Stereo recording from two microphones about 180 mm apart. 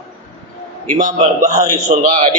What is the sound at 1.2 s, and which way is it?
A man's voice, 35° right (ahead or behind).